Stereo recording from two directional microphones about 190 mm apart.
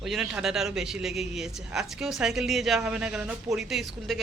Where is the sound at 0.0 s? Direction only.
Centre (ahead or behind).